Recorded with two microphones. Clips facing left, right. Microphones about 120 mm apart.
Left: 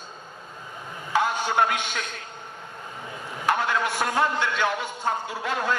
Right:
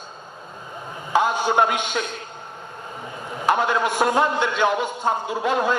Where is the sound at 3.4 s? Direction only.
20° right (ahead or behind).